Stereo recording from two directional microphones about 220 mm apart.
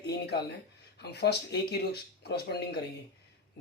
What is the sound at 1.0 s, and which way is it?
Speech, 50° left (ahead or behind).